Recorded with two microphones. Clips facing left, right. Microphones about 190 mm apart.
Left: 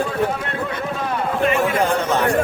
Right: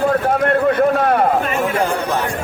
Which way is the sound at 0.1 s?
55° right (ahead or behind).